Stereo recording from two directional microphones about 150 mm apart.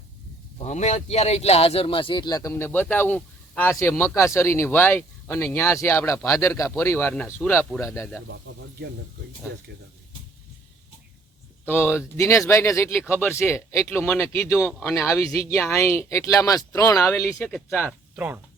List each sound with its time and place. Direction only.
0.6 s speech: 50° left (ahead or behind); by 8.2 s 15° left (ahead or behind)
11.6 s speech: 15° left (ahead or behind)
17.7 s speech: 10° left (ahead or behind)